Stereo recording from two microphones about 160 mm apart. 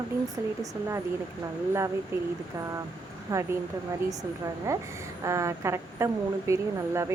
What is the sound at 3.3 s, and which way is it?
Speech, 20° right (ahead or behind).